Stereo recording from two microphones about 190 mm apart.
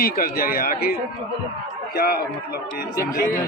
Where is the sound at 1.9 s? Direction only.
55° left (ahead or behind).